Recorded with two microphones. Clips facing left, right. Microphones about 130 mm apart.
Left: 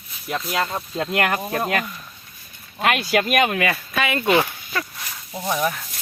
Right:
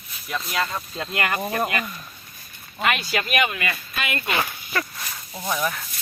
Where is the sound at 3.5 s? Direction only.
90° left.